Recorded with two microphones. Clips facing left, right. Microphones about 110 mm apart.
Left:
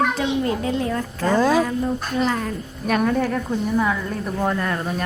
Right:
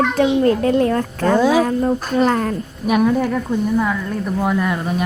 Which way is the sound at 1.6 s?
50° right (ahead or behind).